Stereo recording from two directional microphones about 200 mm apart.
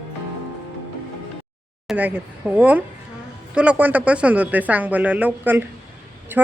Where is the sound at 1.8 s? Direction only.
5° right (ahead or behind).